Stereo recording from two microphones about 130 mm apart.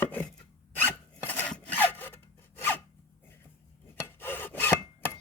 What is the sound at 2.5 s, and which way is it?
Filing, 15° left (ahead or behind).